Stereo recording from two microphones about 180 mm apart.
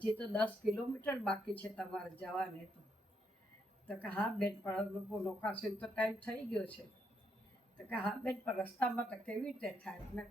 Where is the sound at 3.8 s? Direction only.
5° left (ahead or behind).